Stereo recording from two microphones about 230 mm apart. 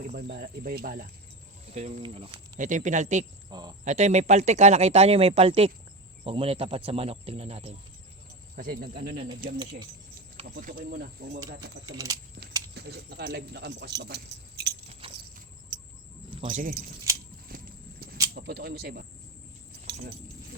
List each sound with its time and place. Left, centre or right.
0.0 s speech: right
1.7 s speech: right
2.6 s speech: right
3.5 s speech: centre
3.8 s speech: right
8.5 s speech: right
10.5 s speech: right
11.9 s speech: centre
12.7 s speech: right
15.1 s car: right
16.3 s speech: right
17.1 s a sound: centre
17.5 s clip-clop: right
18.3 s speech: right